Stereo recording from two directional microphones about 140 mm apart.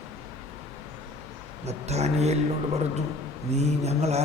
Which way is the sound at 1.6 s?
50° right (ahead or behind).